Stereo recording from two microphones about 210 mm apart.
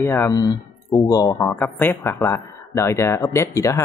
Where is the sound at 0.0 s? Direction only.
10° left (ahead or behind).